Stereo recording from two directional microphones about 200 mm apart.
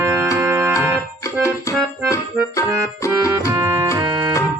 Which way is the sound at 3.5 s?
10° right (ahead or behind).